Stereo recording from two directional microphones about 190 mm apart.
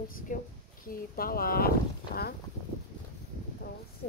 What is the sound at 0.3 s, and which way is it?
Speech, 45° left (ahead or behind).